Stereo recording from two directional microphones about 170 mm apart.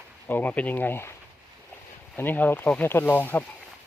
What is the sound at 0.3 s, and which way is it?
Speech, 10° left (ahead or behind).